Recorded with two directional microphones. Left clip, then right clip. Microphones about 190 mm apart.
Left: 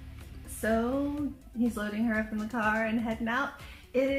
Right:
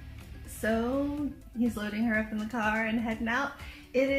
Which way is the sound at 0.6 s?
Centre (ahead or behind).